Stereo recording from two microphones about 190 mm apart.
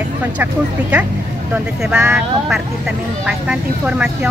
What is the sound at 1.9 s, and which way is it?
Speech, 5° right (ahead or behind).